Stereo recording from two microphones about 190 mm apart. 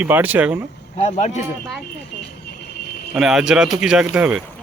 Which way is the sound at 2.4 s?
55° left (ahead or behind).